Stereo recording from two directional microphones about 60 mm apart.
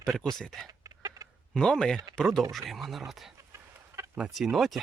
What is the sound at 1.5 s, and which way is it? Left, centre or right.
Speech, centre.